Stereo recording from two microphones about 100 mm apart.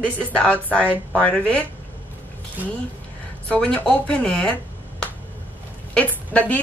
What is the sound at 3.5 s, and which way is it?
Speech, 15° left (ahead or behind).